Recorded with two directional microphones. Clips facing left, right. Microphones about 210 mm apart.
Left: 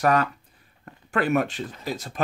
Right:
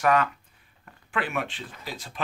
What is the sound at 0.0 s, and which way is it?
Speech, 40° left (ahead or behind).